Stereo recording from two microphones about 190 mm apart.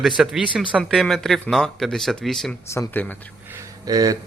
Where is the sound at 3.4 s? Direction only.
15° right (ahead or behind).